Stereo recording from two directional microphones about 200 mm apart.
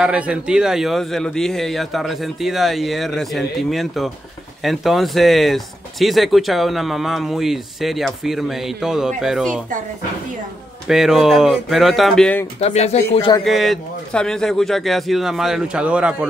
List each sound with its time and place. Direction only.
0.0 s speech: 5° right (ahead or behind)
10.9 s speech: centre (ahead or behind)
12.5 s speech: 30° left (ahead or behind)
13.4 s speech: centre (ahead or behind)